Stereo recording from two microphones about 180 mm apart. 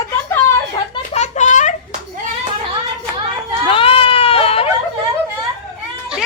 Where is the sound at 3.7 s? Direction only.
30° left (ahead or behind).